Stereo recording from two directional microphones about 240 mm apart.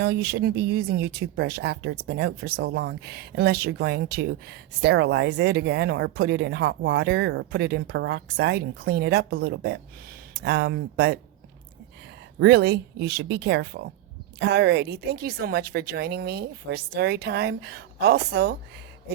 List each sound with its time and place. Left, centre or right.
0.0 s speech: right
12.4 s a woman's voice: right